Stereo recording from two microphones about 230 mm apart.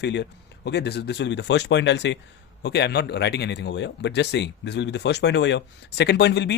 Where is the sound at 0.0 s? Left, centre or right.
Left.